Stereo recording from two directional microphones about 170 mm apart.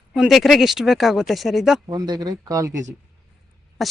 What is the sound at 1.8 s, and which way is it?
Speech, 25° right (ahead or behind).